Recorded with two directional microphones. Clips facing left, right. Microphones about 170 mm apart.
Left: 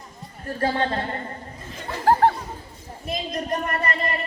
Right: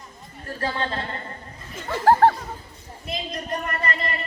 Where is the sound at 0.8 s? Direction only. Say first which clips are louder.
Left 4 dB; 35° left (ahead or behind).